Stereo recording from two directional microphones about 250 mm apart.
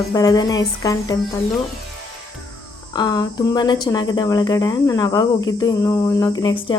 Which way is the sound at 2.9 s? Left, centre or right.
Centre.